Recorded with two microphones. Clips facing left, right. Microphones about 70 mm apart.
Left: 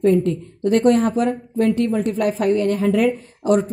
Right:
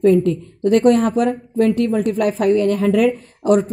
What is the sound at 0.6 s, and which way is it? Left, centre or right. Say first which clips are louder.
A woman's voice: right 2 dB; right.